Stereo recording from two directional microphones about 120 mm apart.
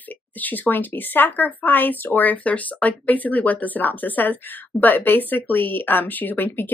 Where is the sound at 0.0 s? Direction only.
15° left (ahead or behind).